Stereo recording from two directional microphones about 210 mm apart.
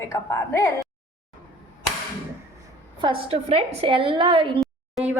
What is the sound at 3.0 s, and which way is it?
A woman's voice, 25° right (ahead or behind).